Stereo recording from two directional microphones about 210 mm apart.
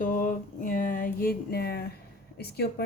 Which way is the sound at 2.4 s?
50° left (ahead or behind).